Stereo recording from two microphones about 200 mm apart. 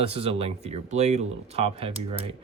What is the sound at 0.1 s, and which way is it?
Speech, 30° right (ahead or behind).